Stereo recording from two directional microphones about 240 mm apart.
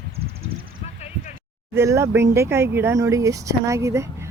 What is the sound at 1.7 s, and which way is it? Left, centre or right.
Speech, centre.